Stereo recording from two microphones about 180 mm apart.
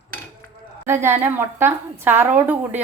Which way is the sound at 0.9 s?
15° right (ahead or behind).